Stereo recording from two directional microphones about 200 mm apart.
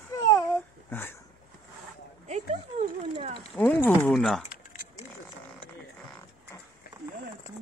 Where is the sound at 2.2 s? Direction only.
35° right (ahead or behind).